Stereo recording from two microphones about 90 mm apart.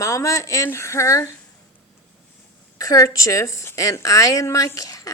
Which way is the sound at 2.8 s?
40° left (ahead or behind).